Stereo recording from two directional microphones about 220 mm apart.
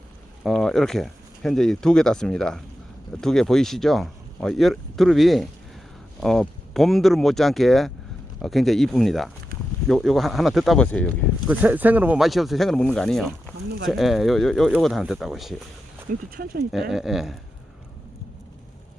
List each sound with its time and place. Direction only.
0.4 s speech: centre (ahead or behind)
11.4 s speech: 10° right (ahead or behind)
16.3 s speech: 45° right (ahead or behind)
16.9 s speech: centre (ahead or behind)